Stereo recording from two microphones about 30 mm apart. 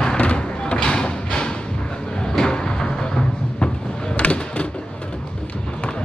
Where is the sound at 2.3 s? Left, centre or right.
Left.